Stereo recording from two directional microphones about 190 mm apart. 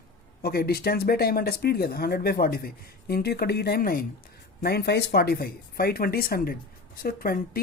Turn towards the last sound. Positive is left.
turn(degrees=50)  # may be behind; listen again after turning